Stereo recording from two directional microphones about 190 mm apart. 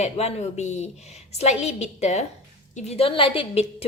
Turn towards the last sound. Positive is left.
turn(degrees=30)  # may be behind; listen again after turning